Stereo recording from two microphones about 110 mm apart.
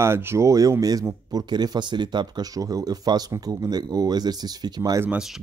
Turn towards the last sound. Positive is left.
turn(degrees=-35)  # may be behind; listen again after turning